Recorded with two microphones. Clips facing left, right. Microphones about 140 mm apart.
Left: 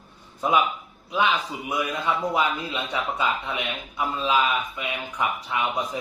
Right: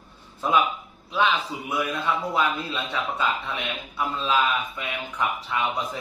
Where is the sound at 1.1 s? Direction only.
15° left (ahead or behind).